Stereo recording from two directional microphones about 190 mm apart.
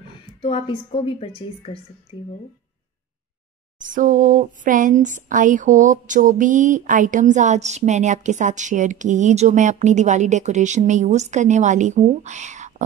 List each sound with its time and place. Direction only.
0.4 s a woman's voice: 30° left (ahead or behind)
3.8 s speech: 45° right (ahead or behind)
4.6 s a sound: 45° right (ahead or behind)